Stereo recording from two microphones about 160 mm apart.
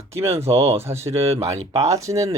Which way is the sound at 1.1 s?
40° right (ahead or behind).